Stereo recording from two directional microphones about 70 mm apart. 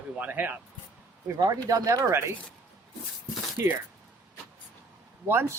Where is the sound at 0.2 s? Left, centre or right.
Right.